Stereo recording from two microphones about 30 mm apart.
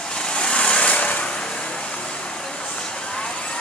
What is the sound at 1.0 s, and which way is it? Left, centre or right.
Vehicle, left.